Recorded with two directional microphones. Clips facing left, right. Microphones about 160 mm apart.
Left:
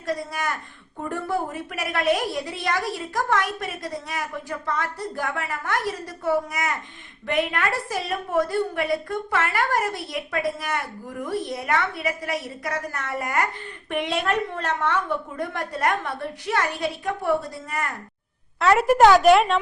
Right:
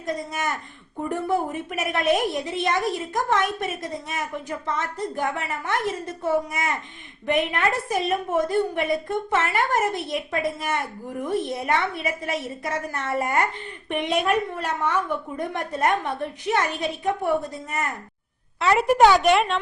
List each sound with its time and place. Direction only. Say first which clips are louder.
0.0 s a woman's voice: even; 20° right (ahead or behind)
18.6 s a woman's voice: left 1 dB; centre (ahead or behind)